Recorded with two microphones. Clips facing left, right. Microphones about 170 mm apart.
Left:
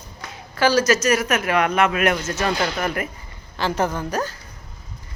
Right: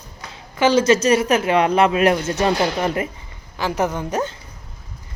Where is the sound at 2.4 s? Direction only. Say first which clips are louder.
Right 3 dB; 20° right (ahead or behind).